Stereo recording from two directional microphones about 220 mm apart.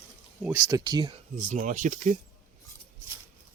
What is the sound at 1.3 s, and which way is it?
Speech, 35° right (ahead or behind).